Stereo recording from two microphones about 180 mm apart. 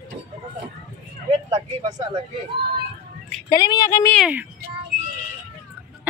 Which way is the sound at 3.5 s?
20° left (ahead or behind).